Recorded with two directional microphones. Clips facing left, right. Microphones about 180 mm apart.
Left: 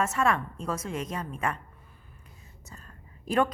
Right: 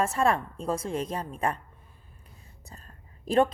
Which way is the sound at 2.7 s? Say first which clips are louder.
Left 1 dB; 35° right (ahead or behind).